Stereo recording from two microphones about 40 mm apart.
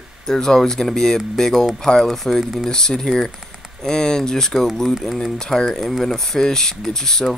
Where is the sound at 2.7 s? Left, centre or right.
Centre.